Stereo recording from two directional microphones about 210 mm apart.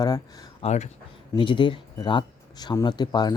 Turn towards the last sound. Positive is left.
turn(degrees=20)  # may be behind; listen again after turning